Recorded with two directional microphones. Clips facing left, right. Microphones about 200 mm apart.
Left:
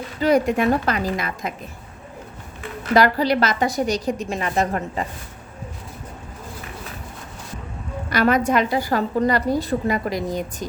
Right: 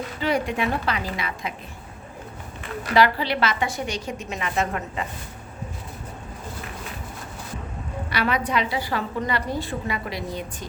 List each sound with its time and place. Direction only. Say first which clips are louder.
0.2 s a woman's voice: left 7 dB; 40° left (ahead or behind)
2.9 s a woman's voice: left 4 dB; 40° left (ahead or behind)
8.1 s a woman's voice: left 6 dB; 45° left (ahead or behind)